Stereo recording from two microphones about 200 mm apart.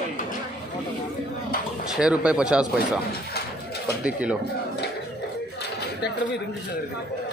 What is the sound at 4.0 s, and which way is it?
Speech, 5° right (ahead or behind).